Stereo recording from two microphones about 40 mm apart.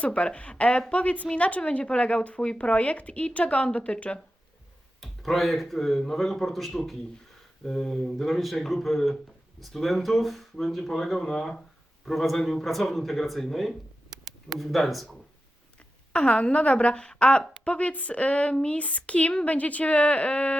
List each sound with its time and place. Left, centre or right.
0.0 s a woman's voice: left
4.9 s speech: centre
12.0 s speech: centre
16.1 s a woman's voice: left